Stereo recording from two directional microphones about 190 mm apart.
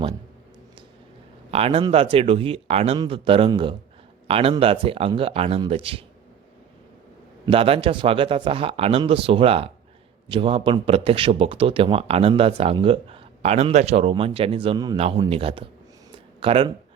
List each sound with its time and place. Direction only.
1.5 s a man's voice: 30° right (ahead or behind)
7.4 s a man's voice: 30° right (ahead or behind)